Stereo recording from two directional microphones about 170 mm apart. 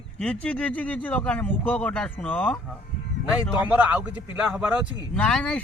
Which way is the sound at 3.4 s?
10° right (ahead or behind).